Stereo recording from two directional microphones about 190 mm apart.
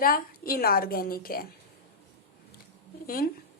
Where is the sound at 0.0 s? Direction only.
50° left (ahead or behind).